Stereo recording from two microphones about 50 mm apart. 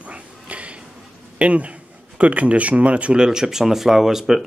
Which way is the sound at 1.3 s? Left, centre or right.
Right.